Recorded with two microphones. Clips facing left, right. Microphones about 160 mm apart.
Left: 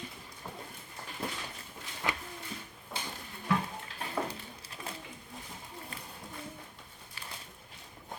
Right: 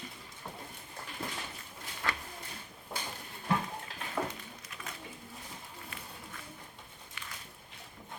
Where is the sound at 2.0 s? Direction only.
15° left (ahead or behind).